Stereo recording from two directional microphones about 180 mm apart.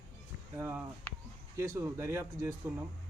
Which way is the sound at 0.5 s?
15° right (ahead or behind).